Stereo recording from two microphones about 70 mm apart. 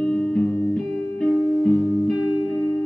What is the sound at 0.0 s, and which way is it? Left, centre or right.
Music, centre.